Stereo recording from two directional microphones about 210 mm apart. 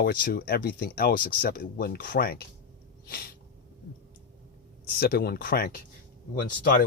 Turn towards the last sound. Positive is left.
turn(degrees=45)  # may be behind; listen again after turning